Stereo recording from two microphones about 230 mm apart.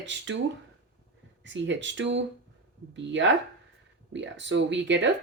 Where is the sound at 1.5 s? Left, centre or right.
Right.